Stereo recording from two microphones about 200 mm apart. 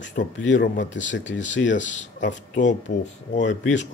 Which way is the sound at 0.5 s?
40° left (ahead or behind).